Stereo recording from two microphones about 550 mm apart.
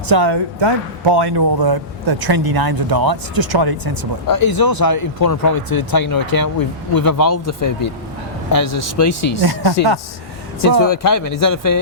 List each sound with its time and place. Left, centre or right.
0.1 s a man's voice: right
4.3 s speech: left
9.4 s a man's voice: right
10.6 s speech: left